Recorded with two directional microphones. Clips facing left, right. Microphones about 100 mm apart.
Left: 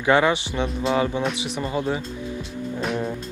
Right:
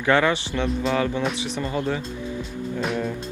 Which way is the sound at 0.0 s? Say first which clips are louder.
Left 1 dB; 15° left (ahead or behind).